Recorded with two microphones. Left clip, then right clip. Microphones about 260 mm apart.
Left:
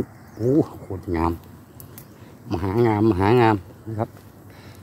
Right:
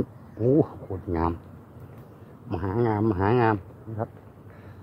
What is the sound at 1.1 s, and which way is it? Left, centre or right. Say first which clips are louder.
Speech: left 4 dB; centre.